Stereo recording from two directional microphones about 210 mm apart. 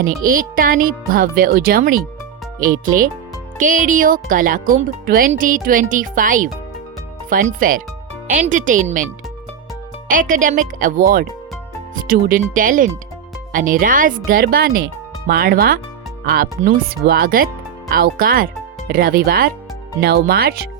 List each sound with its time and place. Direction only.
0.3 s speech: 40° right (ahead or behind)
10.1 s speech: 40° right (ahead or behind)
12.0 s speech: 40° right (ahead or behind)